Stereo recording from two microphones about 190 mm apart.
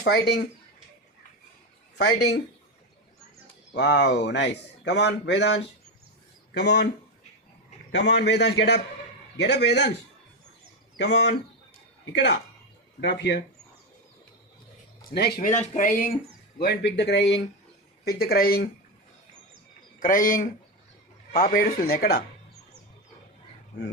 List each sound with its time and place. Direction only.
2.0 s speech: 60° left (ahead or behind)
3.8 s speech: 65° left (ahead or behind)
7.9 s speech: 65° left (ahead or behind)
10.9 s speech: 65° left (ahead or behind)
15.1 s speech: 55° left (ahead or behind)
15.4 s speech: 35° left (ahead or behind)
16.6 s speech: 60° left (ahead or behind)
18.0 s speech: 55° left (ahead or behind)
20.0 s speech: 45° left (ahead or behind)